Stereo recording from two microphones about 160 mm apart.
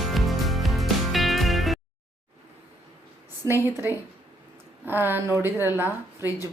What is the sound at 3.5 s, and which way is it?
A woman's voice, 15° right (ahead or behind).